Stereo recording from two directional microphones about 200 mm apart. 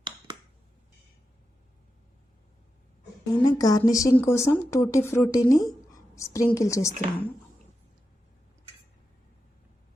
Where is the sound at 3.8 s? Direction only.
15° left (ahead or behind).